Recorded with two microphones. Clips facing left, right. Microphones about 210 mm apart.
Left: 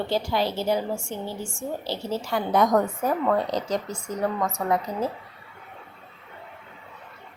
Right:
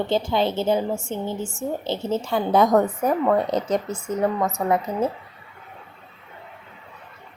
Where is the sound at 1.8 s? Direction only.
25° right (ahead or behind).